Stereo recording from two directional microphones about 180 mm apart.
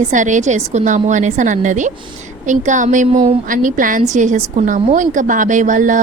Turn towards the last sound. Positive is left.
turn(degrees=-45)  # may be behind; listen again after turning